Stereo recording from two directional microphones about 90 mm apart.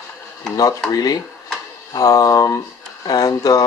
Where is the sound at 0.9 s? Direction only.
45° left (ahead or behind).